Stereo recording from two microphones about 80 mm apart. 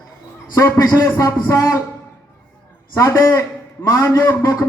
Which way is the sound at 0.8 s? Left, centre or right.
Left.